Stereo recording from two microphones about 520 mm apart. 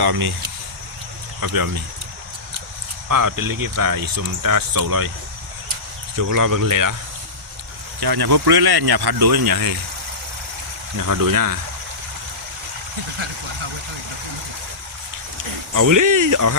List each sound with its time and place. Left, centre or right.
0.0 s speech: right
1.4 s speech: right
3.1 s speech: right
6.3 s speech: right
8.0 s speech: right
11.1 s speech: right
15.7 s speech: right